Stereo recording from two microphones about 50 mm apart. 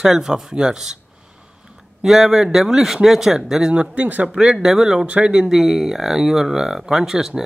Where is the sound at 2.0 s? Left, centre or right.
Centre.